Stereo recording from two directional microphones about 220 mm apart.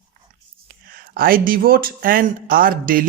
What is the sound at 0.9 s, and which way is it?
Speech, 40° right (ahead or behind).